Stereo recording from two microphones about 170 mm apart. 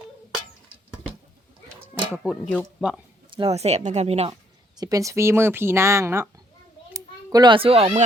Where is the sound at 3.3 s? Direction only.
35° right (ahead or behind).